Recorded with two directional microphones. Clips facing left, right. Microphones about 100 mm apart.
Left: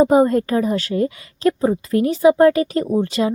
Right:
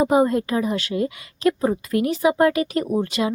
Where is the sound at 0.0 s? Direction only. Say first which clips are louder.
Left 4 dB; 35° left (ahead or behind).